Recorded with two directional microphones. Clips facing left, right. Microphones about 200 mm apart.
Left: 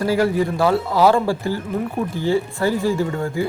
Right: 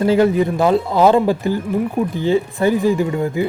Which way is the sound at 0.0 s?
20° right (ahead or behind).